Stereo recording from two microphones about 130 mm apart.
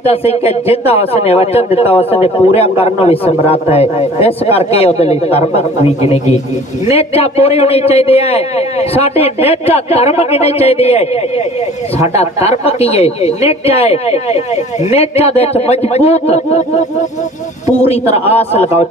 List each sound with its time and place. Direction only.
0.0 s a man's voice: 50° left (ahead or behind)
17.6 s a man's voice: 55° left (ahead or behind)